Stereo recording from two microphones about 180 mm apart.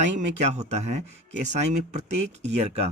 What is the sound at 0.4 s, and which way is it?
Speech, 40° right (ahead or behind).